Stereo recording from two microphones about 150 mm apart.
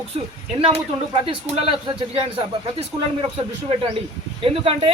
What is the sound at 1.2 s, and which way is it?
Speech, 40° right (ahead or behind).